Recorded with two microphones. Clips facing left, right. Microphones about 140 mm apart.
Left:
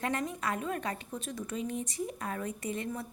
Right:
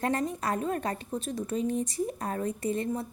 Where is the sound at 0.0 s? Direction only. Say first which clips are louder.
Right 4 dB; 35° right (ahead or behind).